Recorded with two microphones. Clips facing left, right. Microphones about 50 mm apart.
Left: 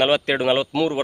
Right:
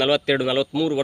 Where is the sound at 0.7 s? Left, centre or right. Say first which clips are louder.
Left 1 dB; left.